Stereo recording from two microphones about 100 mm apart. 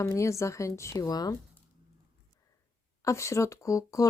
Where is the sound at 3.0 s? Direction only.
30° left (ahead or behind).